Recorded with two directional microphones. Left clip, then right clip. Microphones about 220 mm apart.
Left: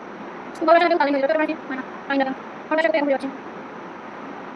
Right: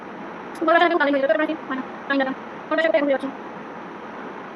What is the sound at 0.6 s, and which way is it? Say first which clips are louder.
Speech: left 1 dB; 10° right (ahead or behind).